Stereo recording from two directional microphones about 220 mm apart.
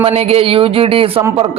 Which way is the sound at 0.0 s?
25° right (ahead or behind).